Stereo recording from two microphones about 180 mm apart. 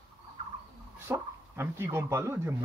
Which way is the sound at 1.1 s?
15° right (ahead or behind).